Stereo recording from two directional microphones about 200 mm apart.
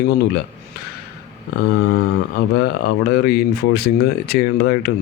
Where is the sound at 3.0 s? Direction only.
50° left (ahead or behind).